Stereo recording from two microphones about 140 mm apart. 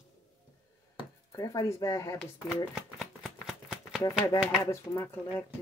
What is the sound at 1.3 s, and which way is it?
Speech, 25° left (ahead or behind).